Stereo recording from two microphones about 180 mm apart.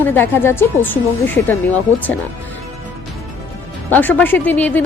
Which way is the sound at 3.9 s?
10° left (ahead or behind).